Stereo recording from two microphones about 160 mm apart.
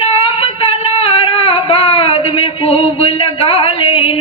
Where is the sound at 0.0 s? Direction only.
35° left (ahead or behind).